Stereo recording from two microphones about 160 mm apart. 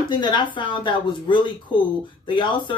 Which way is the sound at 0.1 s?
30° left (ahead or behind).